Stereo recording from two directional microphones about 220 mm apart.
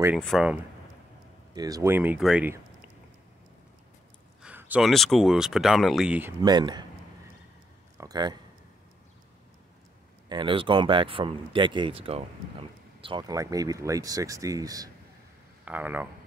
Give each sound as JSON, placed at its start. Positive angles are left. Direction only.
{"t": 0.2, "sound": "speech", "side_deg": 0}
{"t": 1.5, "sound": "speech", "side_deg": -15}
{"t": 4.4, "sound": "speech", "side_deg": -5}
{"t": 6.4, "sound": "speech", "side_deg": -20}
{"t": 8.0, "sound": "a man's voice", "side_deg": -20}
{"t": 10.2, "sound": "speech", "side_deg": -20}